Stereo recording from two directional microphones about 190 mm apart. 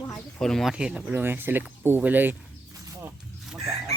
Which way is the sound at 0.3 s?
Centre (ahead or behind).